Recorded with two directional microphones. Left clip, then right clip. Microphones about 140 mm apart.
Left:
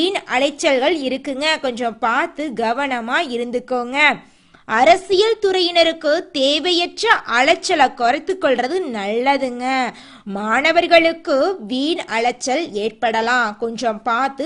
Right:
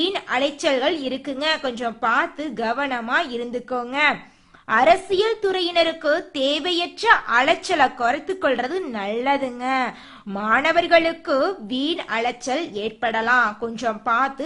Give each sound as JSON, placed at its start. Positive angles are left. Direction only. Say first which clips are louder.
{"t": 0.0, "sound": "a woman's voice", "louder": "left 4 dB", "side_deg": 35}